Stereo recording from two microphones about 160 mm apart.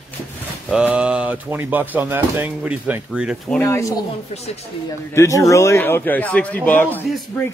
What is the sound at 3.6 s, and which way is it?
Speech, 15° left (ahead or behind).